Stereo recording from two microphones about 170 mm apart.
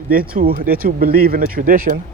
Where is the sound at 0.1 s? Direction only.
60° right (ahead or behind).